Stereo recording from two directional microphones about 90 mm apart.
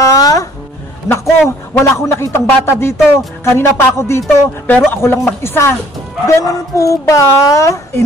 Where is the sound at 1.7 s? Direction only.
30° left (ahead or behind).